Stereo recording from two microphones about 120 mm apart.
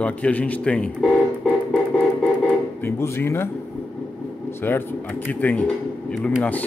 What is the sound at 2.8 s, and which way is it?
Speech, 20° left (ahead or behind).